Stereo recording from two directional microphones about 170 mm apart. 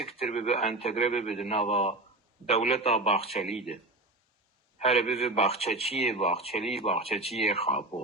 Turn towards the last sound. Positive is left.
turn(degrees=35)  # may be behind; listen again after turning